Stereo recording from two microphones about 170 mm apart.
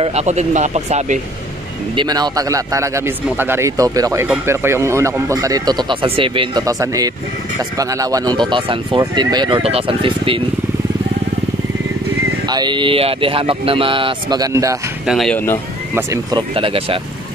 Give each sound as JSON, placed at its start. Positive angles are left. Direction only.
{"t": 0.0, "sound": "speech", "side_deg": -40}
{"t": 2.0, "sound": "speech", "side_deg": -25}
{"t": 6.6, "sound": "speech", "side_deg": -20}
{"t": 12.4, "sound": "speech", "side_deg": -25}
{"t": 15.0, "sound": "speech", "side_deg": 0}
{"t": 15.9, "sound": "speech", "side_deg": -20}